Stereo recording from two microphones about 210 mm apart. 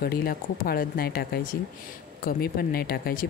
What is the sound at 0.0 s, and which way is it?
Speech, 45° left (ahead or behind).